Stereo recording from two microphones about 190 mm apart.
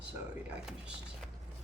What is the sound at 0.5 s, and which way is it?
Speech, 5° right (ahead or behind).